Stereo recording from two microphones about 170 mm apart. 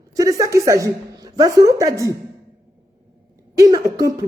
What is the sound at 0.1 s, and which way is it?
A woman's voice, 20° right (ahead or behind).